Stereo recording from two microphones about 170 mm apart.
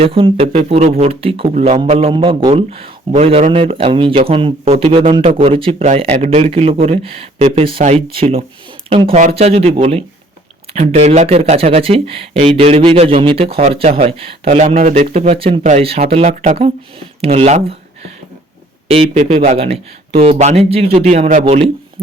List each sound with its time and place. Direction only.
0.0 s speech: 30° right (ahead or behind)
5.8 s speech: 40° right (ahead or behind)
18.9 s speech: 40° right (ahead or behind)
19.5 s speech: 35° right (ahead or behind)
21.4 s speech: 35° right (ahead or behind)